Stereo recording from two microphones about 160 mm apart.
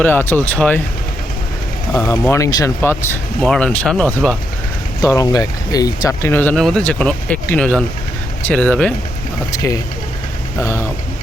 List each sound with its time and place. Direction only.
0.0 s speech: 15° left (ahead or behind)
1.9 s speech: 15° left (ahead or behind)
4.9 s speech: 20° left (ahead or behind)
6.6 s speech: 5° left (ahead or behind)
10.6 s speech: 20° left (ahead or behind)